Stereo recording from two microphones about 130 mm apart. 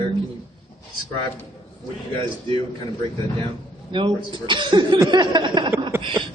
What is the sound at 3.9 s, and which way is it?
A woman's voice, 40° right (ahead or behind).